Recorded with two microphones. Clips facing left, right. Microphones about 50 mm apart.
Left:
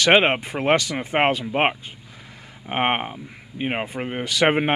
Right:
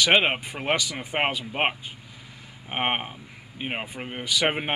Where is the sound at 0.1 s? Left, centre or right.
Centre.